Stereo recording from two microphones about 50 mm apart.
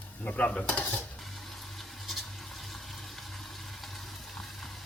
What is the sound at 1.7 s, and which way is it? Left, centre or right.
Water, centre.